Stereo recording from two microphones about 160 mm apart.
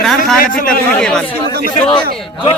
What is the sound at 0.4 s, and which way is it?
Speech, 60° left (ahead or behind).